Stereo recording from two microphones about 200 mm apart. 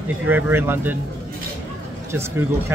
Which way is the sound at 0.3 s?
10° right (ahead or behind).